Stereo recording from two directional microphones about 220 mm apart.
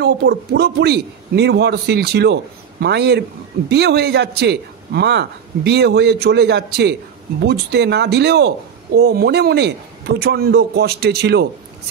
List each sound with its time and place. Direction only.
0.0 s a man's voice: 45° right (ahead or behind)